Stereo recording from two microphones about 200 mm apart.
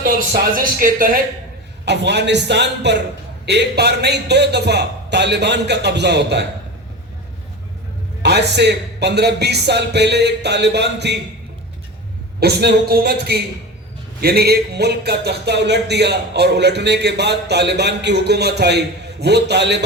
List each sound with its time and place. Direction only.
0.0 s speech: 45° right (ahead or behind)
1.8 s speech: 60° right (ahead or behind)
8.2 s speech: 55° right (ahead or behind)
12.4 s speech: 55° right (ahead or behind)